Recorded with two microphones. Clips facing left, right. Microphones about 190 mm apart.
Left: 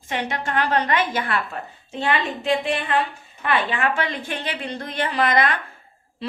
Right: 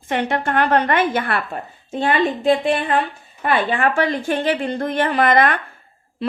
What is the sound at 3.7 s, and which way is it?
A woman's voice, 45° right (ahead or behind).